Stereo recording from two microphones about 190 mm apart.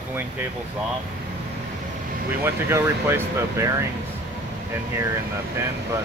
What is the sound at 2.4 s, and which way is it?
Speech, 10° right (ahead or behind).